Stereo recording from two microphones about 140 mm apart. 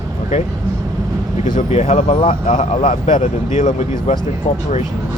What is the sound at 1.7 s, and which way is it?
Speech, 50° left (ahead or behind).